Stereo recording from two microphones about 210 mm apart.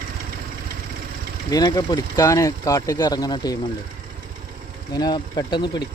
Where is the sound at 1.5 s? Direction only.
15° left (ahead or behind).